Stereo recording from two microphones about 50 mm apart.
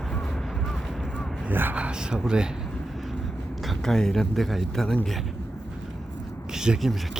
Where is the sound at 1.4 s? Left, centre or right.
Right.